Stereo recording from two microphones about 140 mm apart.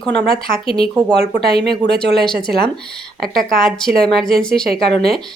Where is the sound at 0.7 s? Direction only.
40° left (ahead or behind).